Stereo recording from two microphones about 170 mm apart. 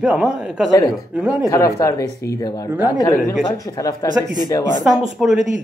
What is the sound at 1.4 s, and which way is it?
Speech, 15° left (ahead or behind).